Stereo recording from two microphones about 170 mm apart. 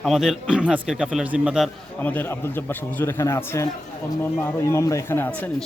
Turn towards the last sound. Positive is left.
turn(degrees=15)  # may be behind; listen again after turning